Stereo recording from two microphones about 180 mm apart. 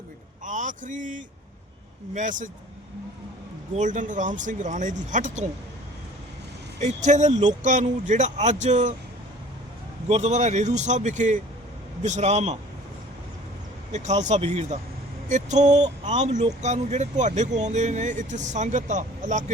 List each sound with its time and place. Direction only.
0.4 s speech: 45° right (ahead or behind)
3.8 s speech: 45° right (ahead or behind)
6.7 s speech: 40° right (ahead or behind)
10.1 s speech: 40° right (ahead or behind)
13.9 s speech: 40° right (ahead or behind)